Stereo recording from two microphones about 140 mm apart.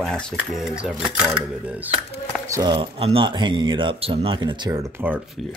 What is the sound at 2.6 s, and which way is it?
Speech, 35° right (ahead or behind).